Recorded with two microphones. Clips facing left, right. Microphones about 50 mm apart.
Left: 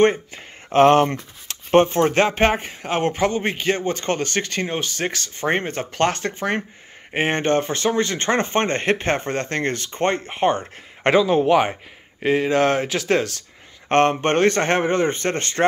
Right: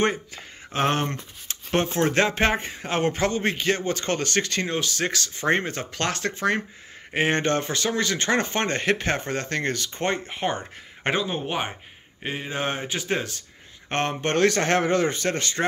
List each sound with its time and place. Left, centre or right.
0.0 s speech: left
0.8 s speech: left
1.7 s speech: left
2.9 s speech: centre; by 10.6 s left
11.1 s speech: left
13.8 s speech: left
14.2 s speech: left